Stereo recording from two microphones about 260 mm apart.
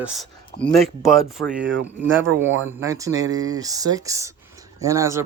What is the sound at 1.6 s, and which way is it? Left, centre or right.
Speech, right.